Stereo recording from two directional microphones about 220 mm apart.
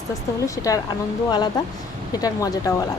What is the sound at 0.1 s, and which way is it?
Speech, 15° left (ahead or behind).